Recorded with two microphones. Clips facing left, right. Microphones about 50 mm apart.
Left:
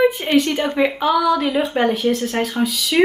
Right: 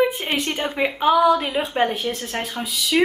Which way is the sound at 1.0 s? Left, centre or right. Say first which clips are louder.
Right 3 dB; right.